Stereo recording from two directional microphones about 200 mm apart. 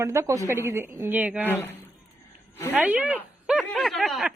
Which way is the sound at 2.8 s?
5° right (ahead or behind).